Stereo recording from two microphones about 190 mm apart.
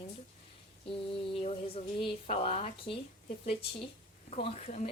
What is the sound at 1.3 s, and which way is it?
Speech, 30° left (ahead or behind).